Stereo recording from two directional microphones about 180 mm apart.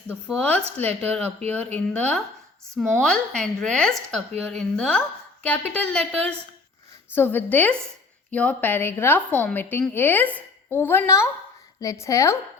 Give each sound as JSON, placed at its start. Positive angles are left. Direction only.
{"t": 0.1, "sound": "a woman's voice", "side_deg": 5}
{"t": 7.1, "sound": "a woman's voice", "side_deg": 10}